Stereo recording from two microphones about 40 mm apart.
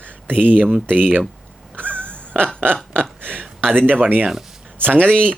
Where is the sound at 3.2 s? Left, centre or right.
Right.